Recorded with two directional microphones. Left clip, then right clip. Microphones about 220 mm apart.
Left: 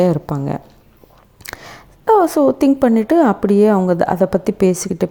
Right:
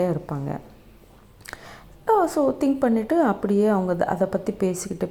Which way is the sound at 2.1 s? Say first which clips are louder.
Left 8 dB; 35° left (ahead or behind).